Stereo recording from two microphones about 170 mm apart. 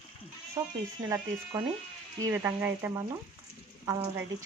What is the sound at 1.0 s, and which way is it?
Speech, 20° right (ahead or behind).